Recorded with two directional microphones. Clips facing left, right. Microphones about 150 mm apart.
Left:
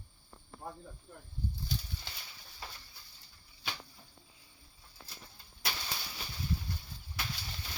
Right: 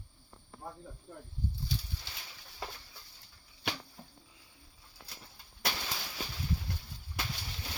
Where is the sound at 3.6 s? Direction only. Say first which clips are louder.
Right 5 dB; 65° right (ahead or behind).